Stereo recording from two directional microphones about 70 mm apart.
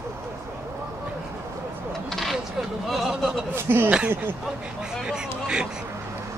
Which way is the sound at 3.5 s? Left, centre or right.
Right.